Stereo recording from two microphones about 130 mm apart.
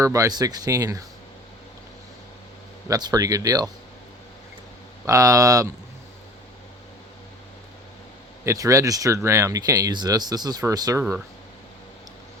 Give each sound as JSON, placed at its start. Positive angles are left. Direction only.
{"t": 0.0, "sound": "speech", "side_deg": -25}
{"t": 2.9, "sound": "speech", "side_deg": -30}
{"t": 5.0, "sound": "speech", "side_deg": -25}
{"t": 8.4, "sound": "speech", "side_deg": -25}